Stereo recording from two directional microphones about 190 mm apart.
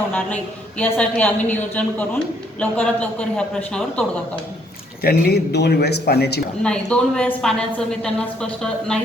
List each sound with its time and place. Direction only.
0.8 s a woman's voice: 5° left (ahead or behind)
5.0 s speech: 55° left (ahead or behind)
6.6 s a woman's voice: 5° left (ahead or behind)